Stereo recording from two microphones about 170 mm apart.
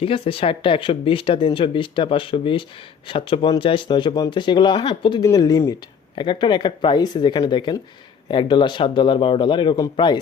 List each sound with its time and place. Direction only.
0.0 s speech: 30° left (ahead or behind)